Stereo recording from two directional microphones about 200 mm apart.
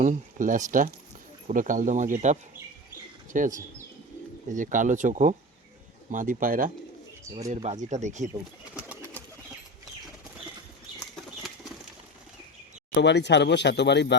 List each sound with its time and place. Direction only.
0.0 s speech: 40° right (ahead or behind)
8.7 s bird: 10° right (ahead or behind)
12.9 s speech: 60° left (ahead or behind)